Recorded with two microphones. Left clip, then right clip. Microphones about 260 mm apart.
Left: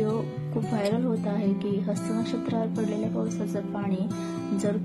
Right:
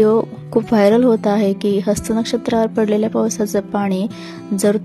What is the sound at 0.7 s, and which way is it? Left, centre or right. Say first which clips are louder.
Speech: right 15 dB; right.